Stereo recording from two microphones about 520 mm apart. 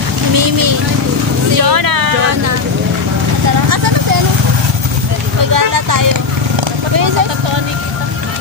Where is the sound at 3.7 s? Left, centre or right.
Right.